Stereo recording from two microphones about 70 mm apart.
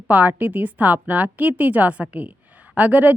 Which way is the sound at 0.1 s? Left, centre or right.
Right.